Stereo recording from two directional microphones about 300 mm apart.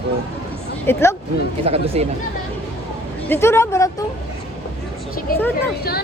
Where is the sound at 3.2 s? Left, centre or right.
Centre.